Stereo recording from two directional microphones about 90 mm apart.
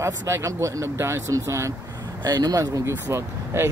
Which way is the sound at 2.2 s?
45° right (ahead or behind).